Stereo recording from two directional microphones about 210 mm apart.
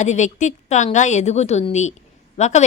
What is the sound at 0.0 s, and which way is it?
A woman's voice, 35° left (ahead or behind).